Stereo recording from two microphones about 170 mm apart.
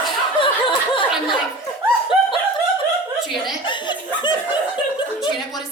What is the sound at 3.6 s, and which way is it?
Chuckle, 25° left (ahead or behind).